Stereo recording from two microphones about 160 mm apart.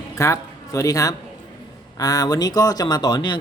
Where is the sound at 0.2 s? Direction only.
20° left (ahead or behind).